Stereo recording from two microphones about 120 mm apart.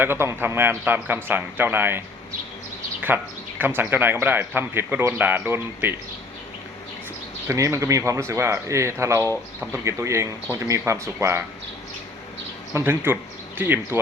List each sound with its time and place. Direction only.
0.0 s speech: 20° right (ahead or behind)
3.1 s speech: 15° right (ahead or behind)
7.4 s speech: 25° right (ahead or behind)
12.7 s speech: 20° right (ahead or behind)